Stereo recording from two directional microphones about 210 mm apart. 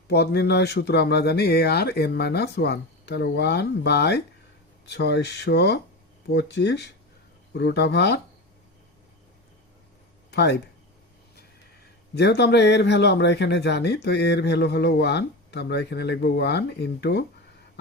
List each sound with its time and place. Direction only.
0.1 s a man's voice: 50° left (ahead or behind)
10.3 s a man's voice: 55° left (ahead or behind)